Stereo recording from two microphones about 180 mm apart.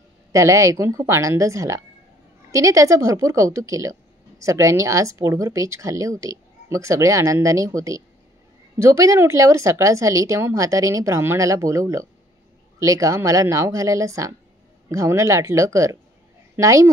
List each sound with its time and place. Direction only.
0.3 s a woman's voice: 15° right (ahead or behind)